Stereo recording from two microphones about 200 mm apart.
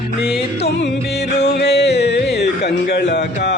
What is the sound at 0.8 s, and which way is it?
Music, 55° left (ahead or behind).